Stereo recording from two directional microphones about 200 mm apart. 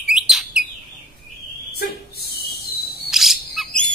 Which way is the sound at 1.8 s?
50° left (ahead or behind).